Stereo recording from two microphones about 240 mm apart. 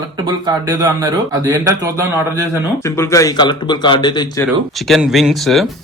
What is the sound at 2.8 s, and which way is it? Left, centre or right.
Speech, centre.